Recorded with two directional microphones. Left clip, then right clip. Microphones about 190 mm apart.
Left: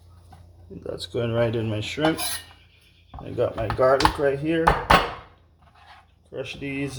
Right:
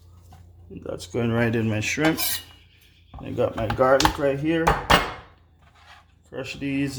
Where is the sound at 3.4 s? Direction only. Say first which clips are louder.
Even; 40° right (ahead or behind).